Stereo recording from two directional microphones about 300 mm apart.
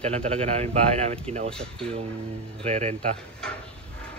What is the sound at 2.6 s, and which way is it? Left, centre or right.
Speech, right.